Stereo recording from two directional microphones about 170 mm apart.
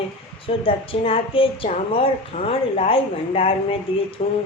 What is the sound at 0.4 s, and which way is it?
A woman's voice, 30° left (ahead or behind).